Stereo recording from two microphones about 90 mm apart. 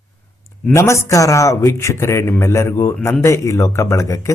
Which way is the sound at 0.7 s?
35° left (ahead or behind).